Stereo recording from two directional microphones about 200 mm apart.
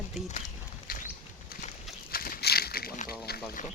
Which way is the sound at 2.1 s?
50° left (ahead or behind).